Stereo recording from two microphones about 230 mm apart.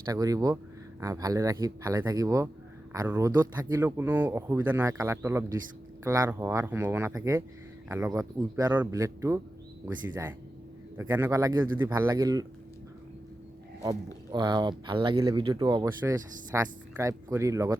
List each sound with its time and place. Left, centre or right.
0.0 s speech: centre
13.8 s speech: centre